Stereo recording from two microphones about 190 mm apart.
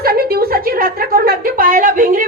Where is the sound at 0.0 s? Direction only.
55° right (ahead or behind).